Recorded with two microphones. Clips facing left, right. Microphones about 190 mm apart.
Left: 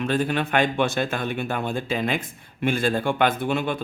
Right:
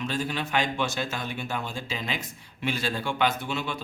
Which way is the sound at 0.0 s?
55° left (ahead or behind).